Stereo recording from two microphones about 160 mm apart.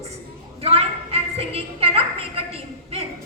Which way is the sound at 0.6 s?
40° right (ahead or behind).